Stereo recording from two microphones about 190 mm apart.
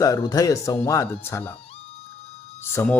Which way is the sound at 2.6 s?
10° left (ahead or behind).